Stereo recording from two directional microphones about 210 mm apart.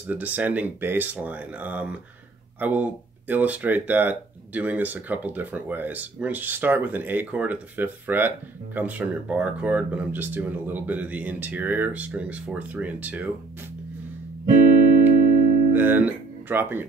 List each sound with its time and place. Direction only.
0.0 s speech: 10° right (ahead or behind)
15.1 s music: 45° right (ahead or behind)
15.7 s speech: 10° right (ahead or behind)